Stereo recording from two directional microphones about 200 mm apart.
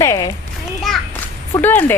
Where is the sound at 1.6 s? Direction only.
10° left (ahead or behind).